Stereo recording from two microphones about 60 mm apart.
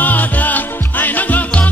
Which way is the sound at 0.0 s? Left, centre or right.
Left.